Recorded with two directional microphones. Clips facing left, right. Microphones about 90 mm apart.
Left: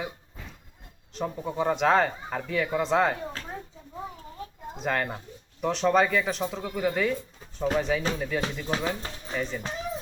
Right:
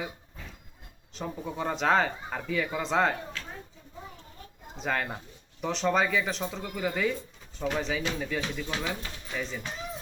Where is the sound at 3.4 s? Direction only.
40° left (ahead or behind).